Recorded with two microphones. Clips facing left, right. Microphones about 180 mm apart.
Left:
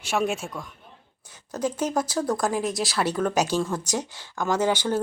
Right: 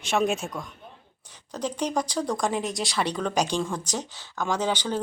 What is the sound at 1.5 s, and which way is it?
Speech, 5° left (ahead or behind).